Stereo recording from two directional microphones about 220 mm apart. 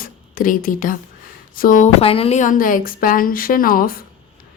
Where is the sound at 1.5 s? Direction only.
40° left (ahead or behind).